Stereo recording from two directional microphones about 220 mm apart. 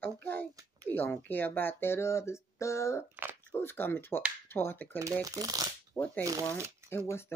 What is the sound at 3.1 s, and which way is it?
Speech, 10° right (ahead or behind).